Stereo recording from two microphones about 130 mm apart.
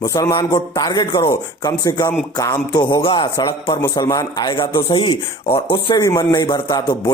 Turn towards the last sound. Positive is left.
turn(degrees=30)  # may be behind; listen again after turning